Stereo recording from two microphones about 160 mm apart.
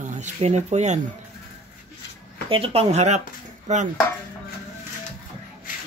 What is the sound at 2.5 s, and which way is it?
Speech, 35° right (ahead or behind).